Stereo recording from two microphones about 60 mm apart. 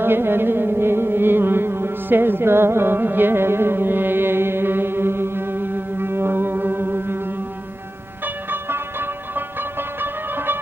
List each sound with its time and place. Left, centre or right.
0.0 s music: right
8.4 s music: right